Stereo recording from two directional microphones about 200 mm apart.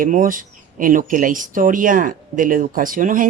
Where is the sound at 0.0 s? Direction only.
40° right (ahead or behind).